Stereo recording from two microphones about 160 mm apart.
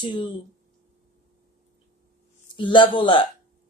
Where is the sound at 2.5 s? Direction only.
30° left (ahead or behind).